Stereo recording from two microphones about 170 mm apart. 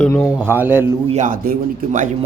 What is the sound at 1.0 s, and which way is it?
A man's voice, 45° right (ahead or behind).